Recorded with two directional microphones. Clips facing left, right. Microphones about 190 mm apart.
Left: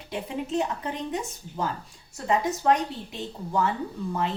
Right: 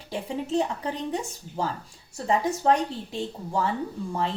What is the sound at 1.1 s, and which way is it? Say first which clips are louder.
A woman's voice: right 1 dB; 30° right (ahead or behind).